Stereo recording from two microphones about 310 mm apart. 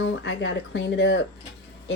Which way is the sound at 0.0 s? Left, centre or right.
Left.